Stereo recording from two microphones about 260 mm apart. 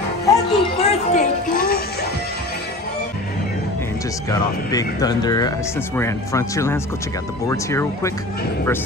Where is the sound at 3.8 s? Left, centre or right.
Centre.